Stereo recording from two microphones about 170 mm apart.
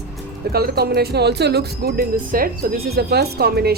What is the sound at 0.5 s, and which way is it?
Speech, 65° right (ahead or behind).